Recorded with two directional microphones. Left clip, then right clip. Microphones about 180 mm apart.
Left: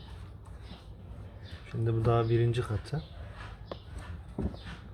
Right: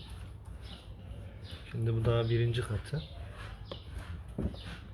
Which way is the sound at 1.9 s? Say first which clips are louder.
Left 3 dB; 60° left (ahead or behind).